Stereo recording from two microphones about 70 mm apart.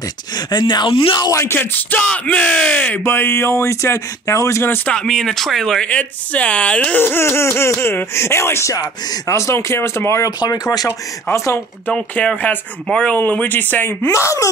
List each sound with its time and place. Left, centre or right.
0.5 s speech: left
1.3 s speech: left
1.6 s speech: left
3.0 s speech: left
5.0 s speech: centre
5.9 s speech: centre
7.0 s speech: left
10.5 s speech: left
11.3 s speech: left
12.2 s speech: left
12.8 s speech: centre
13.1 s speech: left